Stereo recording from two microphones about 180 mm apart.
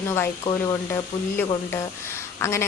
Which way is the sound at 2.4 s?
15° left (ahead or behind).